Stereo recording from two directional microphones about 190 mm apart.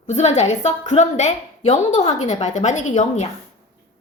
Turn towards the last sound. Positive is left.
turn(degrees=35)  # may be behind; listen again after turning